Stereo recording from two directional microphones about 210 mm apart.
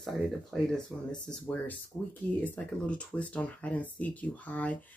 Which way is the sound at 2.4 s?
5° left (ahead or behind).